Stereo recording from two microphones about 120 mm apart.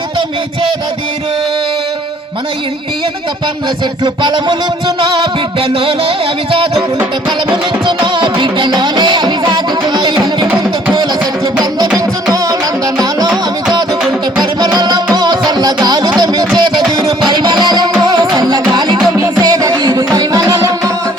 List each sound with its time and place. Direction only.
4.0 s music: 40° right (ahead or behind)
11.9 s music: 30° right (ahead or behind)
14.6 s music: 35° right (ahead or behind)